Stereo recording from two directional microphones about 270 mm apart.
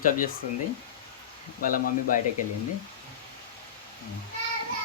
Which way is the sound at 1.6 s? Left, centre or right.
Left.